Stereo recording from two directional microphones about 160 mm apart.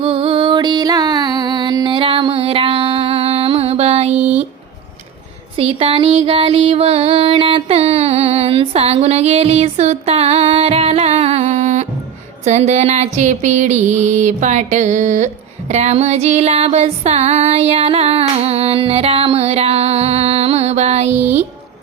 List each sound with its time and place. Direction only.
0.0 s music: 35° right (ahead or behind)
4.1 s a sound: 10° right (ahead or behind)
5.5 s music: 35° right (ahead or behind)
12.5 s a sound: 45° right (ahead or behind)
15.7 s music: 45° right (ahead or behind)
21.1 s speech: 10° right (ahead or behind)